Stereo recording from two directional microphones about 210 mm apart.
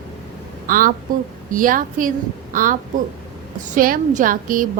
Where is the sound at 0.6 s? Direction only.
40° right (ahead or behind).